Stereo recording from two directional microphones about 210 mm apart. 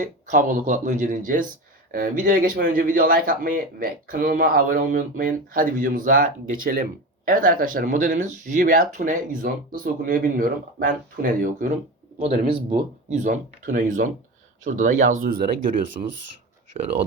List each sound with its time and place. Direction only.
0.0 s speech: 40° right (ahead or behind)
16.7 s speech: 25° right (ahead or behind)